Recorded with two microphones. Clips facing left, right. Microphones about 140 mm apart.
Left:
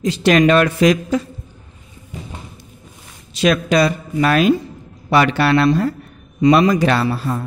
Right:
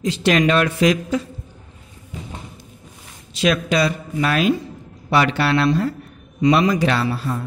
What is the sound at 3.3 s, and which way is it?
Speech, 45° left (ahead or behind).